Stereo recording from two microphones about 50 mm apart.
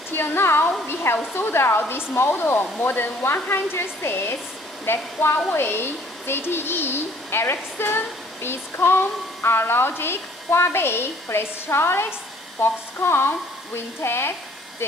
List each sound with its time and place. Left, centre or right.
0.1 s speech: left